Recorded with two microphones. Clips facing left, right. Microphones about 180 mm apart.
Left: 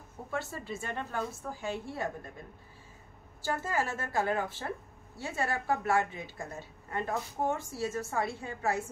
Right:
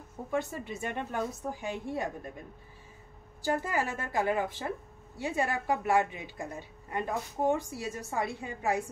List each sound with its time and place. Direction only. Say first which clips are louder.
0.3 s a woman's voice: right 4 dB; 20° right (ahead or behind)
3.4 s a woman's voice: right 2 dB; 15° right (ahead or behind)